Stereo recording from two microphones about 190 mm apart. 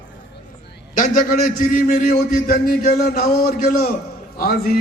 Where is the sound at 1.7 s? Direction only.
50° left (ahead or behind).